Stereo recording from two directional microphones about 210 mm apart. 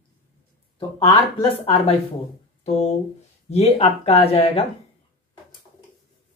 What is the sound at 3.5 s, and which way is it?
Speech, 30° left (ahead or behind).